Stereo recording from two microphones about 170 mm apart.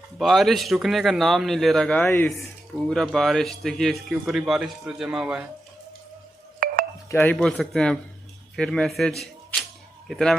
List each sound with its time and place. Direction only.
0.2 s a man's voice: centre (ahead or behind)
6.6 s music: 60° right (ahead or behind)
7.1 s a man's voice: 10° left (ahead or behind)
9.2 s a sound: centre (ahead or behind)